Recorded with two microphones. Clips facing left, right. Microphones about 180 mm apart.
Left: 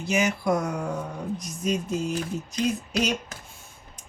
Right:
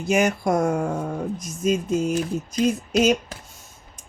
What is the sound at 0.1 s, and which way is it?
Speech, 50° right (ahead or behind).